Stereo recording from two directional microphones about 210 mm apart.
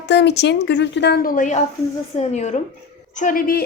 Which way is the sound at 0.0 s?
55° left (ahead or behind).